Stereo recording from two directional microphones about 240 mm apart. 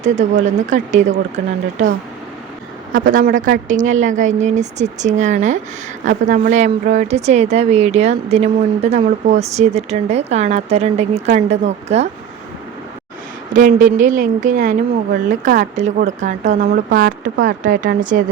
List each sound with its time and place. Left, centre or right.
0.0 s speech: right
2.9 s speech: right
13.5 s speech: right